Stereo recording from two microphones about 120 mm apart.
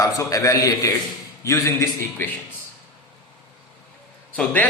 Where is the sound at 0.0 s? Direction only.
30° left (ahead or behind).